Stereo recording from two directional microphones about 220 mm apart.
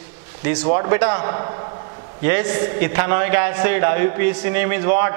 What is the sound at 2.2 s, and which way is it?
Speech, 15° right (ahead or behind).